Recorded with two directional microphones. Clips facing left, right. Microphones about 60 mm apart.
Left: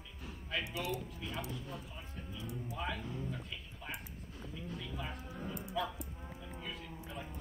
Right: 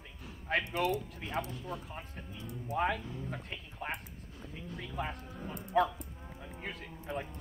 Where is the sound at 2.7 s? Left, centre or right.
Right.